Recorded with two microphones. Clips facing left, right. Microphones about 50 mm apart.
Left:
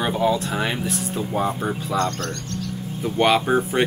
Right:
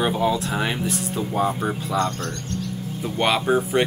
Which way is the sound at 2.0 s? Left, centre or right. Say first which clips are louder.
Left 1 dB; centre.